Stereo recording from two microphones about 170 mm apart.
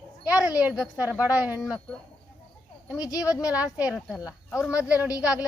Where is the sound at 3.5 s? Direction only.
5° right (ahead or behind).